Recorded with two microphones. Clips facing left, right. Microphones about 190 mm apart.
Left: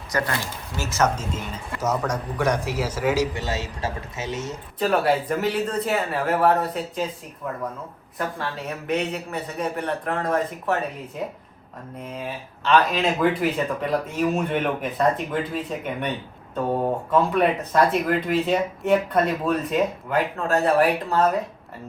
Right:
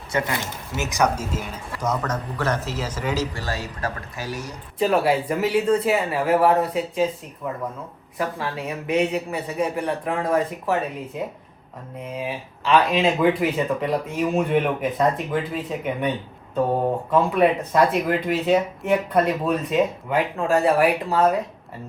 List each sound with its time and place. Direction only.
0.1 s speech: 20° right (ahead or behind)
1.8 s a man's voice: 10° left (ahead or behind)
3.3 s a man's voice: 20° left (ahead or behind)
4.8 s speech: centre (ahead or behind)
8.4 s speech: 5° right (ahead or behind)
12.0 s speech: 5° right (ahead or behind)
17.1 s speech: centre (ahead or behind)